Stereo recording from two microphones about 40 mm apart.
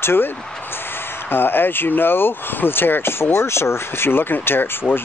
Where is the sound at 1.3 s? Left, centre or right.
Left.